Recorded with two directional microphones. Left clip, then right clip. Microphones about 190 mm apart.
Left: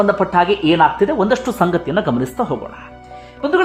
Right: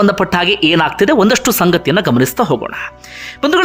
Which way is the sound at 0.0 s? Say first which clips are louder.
Right 1 dB; 30° right (ahead or behind).